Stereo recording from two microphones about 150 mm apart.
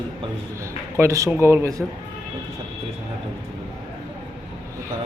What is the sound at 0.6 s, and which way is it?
A man's voice, 20° right (ahead or behind).